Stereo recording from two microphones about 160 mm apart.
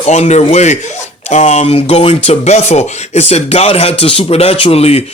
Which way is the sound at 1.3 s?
45° left (ahead or behind).